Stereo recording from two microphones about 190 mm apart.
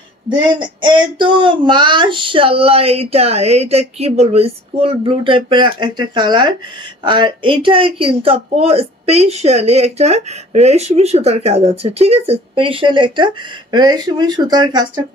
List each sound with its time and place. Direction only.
0.3 s speech: 25° right (ahead or behind)